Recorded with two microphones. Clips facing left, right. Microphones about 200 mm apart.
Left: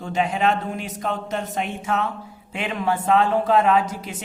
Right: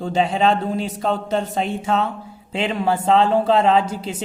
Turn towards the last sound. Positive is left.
turn(degrees=-30)  # may be behind; listen again after turning